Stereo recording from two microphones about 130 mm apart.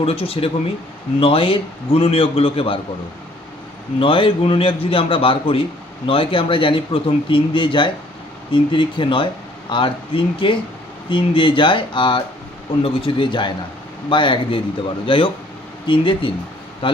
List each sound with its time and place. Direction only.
0.0 s a man's voice: 50° left (ahead or behind)
4.0 s a man's voice: 40° left (ahead or behind)